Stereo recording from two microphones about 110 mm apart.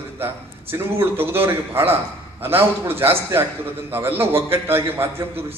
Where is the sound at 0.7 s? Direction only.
20° right (ahead or behind).